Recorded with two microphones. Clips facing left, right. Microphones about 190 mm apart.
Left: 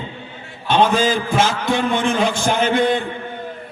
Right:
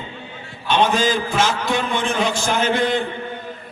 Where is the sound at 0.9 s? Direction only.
55° left (ahead or behind).